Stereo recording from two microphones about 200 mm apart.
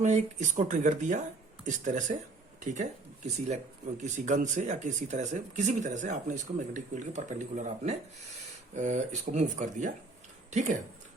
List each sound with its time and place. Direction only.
0.0 s speech: 35° right (ahead or behind)
3.3 s speech: 35° right (ahead or behind)